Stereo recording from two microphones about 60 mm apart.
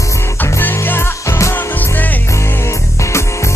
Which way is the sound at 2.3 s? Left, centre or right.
Left.